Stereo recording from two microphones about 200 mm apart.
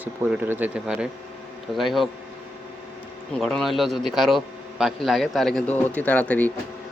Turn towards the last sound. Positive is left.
turn(degrees=5)  # may be behind; listen again after turning